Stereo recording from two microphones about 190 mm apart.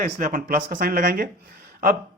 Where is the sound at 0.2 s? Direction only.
45° right (ahead or behind).